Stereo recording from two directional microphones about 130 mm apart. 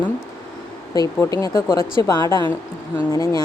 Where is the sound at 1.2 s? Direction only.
25° left (ahead or behind).